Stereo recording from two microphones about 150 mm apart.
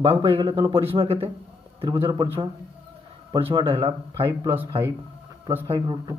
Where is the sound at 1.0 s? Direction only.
40° right (ahead or behind).